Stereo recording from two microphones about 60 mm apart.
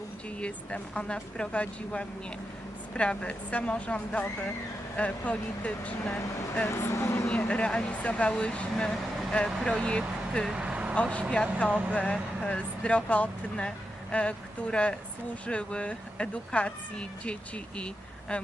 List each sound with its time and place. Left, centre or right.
0.3 s speech: centre
6.7 s speech: left
7.3 s speech: centre
10.5 s vehicle: centre
10.9 s speech: centre